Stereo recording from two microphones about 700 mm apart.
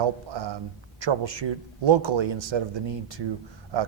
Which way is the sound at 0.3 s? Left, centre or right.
Right.